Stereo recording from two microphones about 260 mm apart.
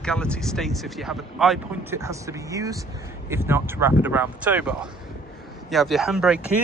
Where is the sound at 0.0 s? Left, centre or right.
Centre.